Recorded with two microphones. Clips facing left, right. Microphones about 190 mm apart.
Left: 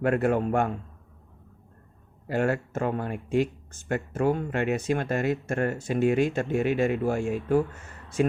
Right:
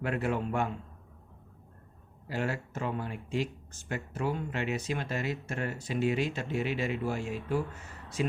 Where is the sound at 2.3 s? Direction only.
50° left (ahead or behind).